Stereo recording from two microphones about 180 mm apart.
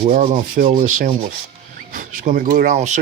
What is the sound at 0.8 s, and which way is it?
Speech, 45° right (ahead or behind).